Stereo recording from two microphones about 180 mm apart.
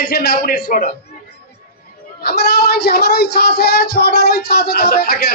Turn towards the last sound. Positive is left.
turn(degrees=60)  # may be behind; listen again after turning